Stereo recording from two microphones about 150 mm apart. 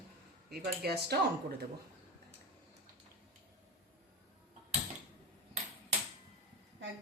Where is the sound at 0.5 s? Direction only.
90° right.